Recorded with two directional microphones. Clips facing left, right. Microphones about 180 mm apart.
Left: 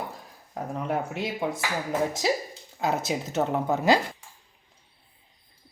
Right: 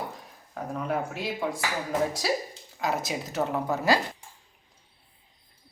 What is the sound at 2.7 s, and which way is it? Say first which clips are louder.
Speech: left 2 dB; 25° left (ahead or behind).